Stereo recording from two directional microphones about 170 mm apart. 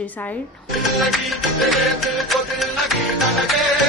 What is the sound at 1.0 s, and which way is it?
Music, centre (ahead or behind).